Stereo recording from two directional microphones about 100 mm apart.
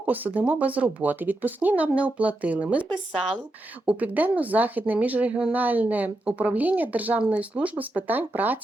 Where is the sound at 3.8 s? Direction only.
15° right (ahead or behind).